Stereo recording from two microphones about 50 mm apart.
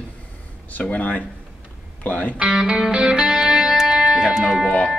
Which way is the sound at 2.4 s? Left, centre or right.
Centre.